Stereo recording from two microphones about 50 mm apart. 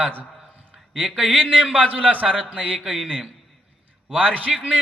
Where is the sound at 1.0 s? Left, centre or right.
Centre.